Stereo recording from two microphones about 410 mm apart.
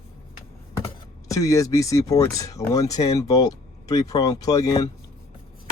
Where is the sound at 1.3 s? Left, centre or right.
Centre.